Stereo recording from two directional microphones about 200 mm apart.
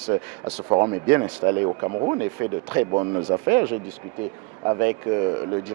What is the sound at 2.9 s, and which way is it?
Speech, 25° right (ahead or behind).